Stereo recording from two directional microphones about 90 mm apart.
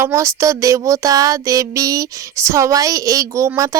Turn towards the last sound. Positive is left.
turn(degrees=-35)  # may be behind; listen again after turning